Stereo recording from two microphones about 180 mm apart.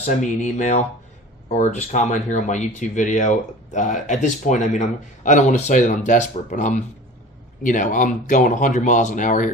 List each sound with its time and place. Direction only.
0.0 s speech: 40° left (ahead or behind)